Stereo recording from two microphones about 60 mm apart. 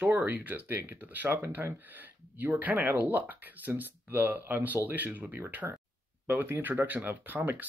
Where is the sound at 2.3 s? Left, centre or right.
Right.